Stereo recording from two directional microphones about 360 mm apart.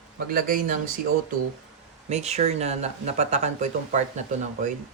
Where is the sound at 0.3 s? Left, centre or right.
Right.